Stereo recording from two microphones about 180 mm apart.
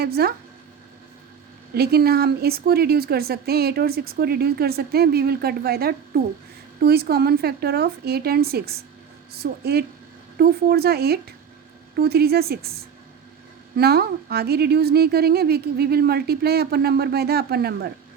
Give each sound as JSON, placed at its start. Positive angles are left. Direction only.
{"t": 0.0, "sound": "speech", "side_deg": -60}
{"t": 1.7, "sound": "speech", "side_deg": -60}
{"t": 13.7, "sound": "speech", "side_deg": -60}